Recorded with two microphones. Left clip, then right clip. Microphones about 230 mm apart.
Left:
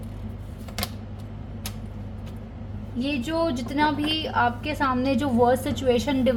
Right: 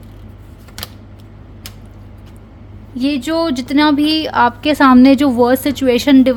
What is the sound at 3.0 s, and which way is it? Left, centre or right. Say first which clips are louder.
A woman's voice: right 9 dB; right.